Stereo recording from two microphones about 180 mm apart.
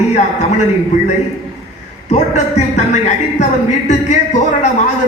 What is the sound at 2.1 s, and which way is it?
A man's voice, 40° left (ahead or behind).